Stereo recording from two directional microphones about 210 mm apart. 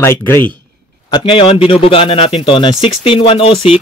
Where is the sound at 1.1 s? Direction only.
25° left (ahead or behind).